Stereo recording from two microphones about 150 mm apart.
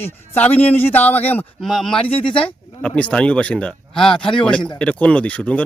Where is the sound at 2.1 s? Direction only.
40° left (ahead or behind).